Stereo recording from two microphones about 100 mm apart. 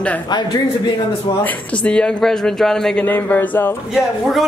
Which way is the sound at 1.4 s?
10° left (ahead or behind).